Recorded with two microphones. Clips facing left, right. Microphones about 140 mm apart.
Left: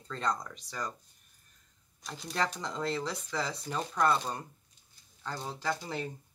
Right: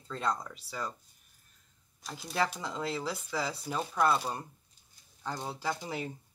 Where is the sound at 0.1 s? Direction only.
5° right (ahead or behind).